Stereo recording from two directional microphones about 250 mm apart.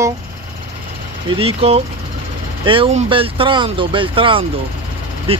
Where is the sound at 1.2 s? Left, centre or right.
Right.